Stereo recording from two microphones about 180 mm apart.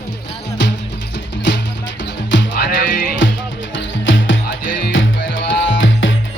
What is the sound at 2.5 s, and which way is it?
Music, 50° left (ahead or behind).